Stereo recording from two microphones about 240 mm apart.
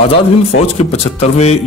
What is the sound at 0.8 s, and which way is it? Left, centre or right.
Speech, left.